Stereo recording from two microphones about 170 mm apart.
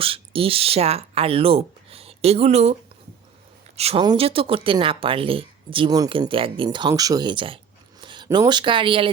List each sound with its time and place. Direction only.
0.0 s speech: 35° right (ahead or behind)
3.8 s speech: 35° right (ahead or behind)